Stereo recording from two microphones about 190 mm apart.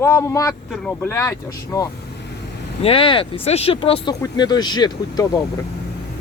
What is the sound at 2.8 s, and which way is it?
Speech, 30° left (ahead or behind).